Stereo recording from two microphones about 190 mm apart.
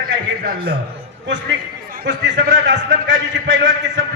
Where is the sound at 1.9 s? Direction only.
65° right (ahead or behind).